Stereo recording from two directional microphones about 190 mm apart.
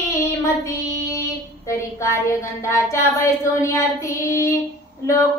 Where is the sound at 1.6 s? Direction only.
15° left (ahead or behind).